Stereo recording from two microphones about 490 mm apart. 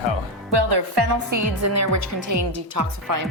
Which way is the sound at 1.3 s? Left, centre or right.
Right.